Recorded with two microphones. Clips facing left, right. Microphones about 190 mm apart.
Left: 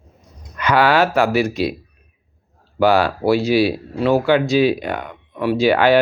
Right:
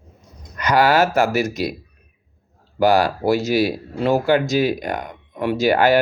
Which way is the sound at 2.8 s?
40° right (ahead or behind).